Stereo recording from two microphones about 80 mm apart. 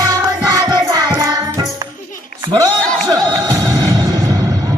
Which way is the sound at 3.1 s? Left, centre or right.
Right.